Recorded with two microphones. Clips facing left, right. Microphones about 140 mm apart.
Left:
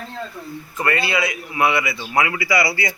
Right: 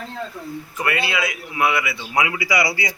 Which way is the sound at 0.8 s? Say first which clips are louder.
Left 2 dB; 10° right (ahead or behind).